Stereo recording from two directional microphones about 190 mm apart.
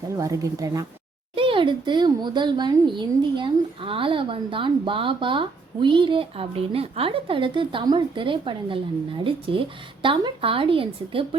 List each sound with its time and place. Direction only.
0.2 s speech: 15° right (ahead or behind)